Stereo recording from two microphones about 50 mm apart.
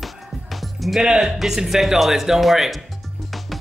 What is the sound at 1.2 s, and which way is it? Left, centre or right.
Speech, centre.